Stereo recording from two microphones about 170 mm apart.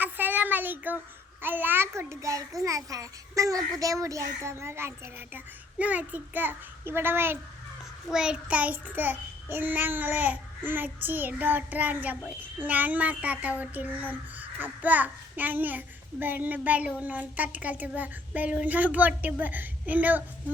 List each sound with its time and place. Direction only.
0.0 s child singing: 10° right (ahead or behind)
2.6 s a child's voice: 20° right (ahead or behind)
3.8 s child singing: 20° right (ahead or behind)